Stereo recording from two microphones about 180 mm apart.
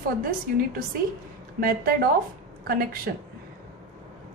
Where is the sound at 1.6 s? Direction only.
55° right (ahead or behind).